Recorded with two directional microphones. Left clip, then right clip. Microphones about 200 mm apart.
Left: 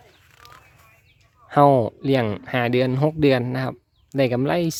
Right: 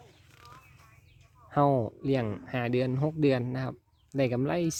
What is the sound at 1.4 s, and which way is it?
Speech, 20° left (ahead or behind).